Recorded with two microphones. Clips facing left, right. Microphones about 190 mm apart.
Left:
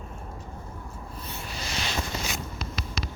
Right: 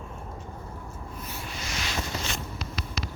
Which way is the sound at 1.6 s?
30° left (ahead or behind).